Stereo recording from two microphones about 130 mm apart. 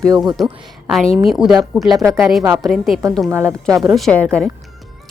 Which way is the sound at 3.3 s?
20° right (ahead or behind).